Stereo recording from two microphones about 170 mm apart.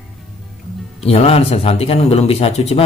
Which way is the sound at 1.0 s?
35° left (ahead or behind).